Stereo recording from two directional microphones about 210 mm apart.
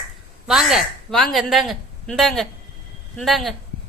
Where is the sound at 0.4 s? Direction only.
Centre (ahead or behind).